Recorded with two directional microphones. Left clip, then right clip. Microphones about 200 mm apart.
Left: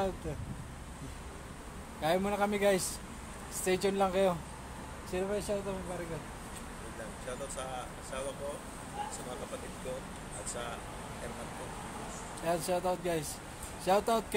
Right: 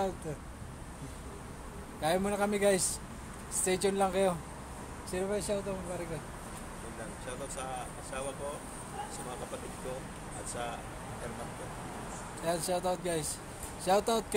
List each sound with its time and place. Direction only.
2.0 s a man's voice: 15° left (ahead or behind)
12.4 s a man's voice: 15° left (ahead or behind)